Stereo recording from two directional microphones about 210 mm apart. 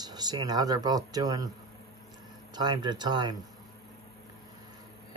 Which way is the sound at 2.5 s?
20° right (ahead or behind).